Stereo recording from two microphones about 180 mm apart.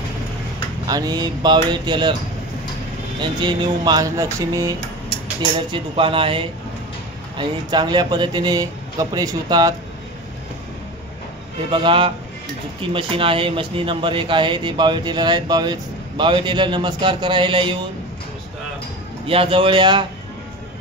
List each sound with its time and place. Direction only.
0.8 s speech: 20° right (ahead or behind)
3.2 s speech: 25° right (ahead or behind)
5.7 s speech: 30° right (ahead or behind)
11.7 s speech: 30° right (ahead or behind)
19.2 s speech: 30° right (ahead or behind)